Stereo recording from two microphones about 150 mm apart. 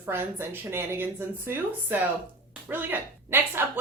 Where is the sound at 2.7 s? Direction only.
15° right (ahead or behind).